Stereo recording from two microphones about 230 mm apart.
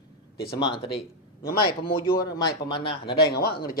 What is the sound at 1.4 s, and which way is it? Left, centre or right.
Speech, left.